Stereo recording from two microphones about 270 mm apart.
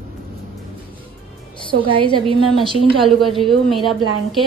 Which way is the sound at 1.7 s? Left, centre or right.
Centre.